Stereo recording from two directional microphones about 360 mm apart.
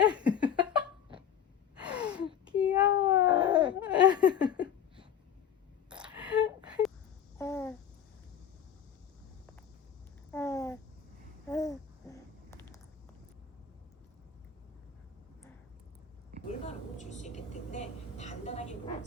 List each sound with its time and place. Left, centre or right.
0.0 s laughter: centre
1.7 s gasp: centre
3.2 s laughter: centre
5.9 s a sound: centre
7.3 s babbling: centre
10.3 s a sound: centre
11.4 s babbling: centre
16.5 s vehicle: centre